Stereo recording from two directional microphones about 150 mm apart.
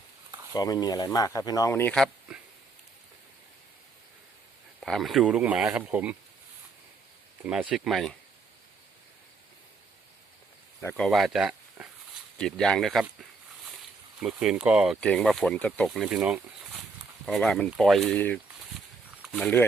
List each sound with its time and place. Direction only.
0.5 s speech: 25° left (ahead or behind)
2.3 s a sound: 5° right (ahead or behind)
4.8 s speech: centre (ahead or behind)
7.4 s speech: 5° right (ahead or behind)
10.8 s speech: 10° left (ahead or behind)
14.2 s speech: 5° right (ahead or behind)
15.0 s speech: 5° left (ahead or behind)